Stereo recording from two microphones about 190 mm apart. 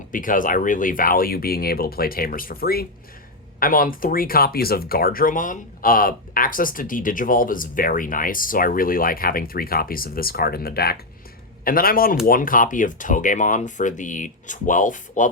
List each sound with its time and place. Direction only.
0.1 s speech: 45° left (ahead or behind)